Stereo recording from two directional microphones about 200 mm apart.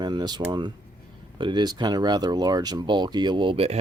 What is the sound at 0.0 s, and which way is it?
Speech, 20° right (ahead or behind).